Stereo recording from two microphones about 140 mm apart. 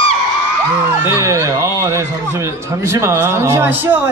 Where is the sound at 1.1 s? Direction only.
20° right (ahead or behind).